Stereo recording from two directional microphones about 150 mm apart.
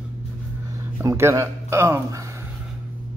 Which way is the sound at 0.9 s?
15° right (ahead or behind).